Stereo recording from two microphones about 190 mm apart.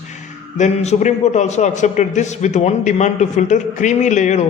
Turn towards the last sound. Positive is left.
turn(degrees=40)  # may be behind; listen again after turning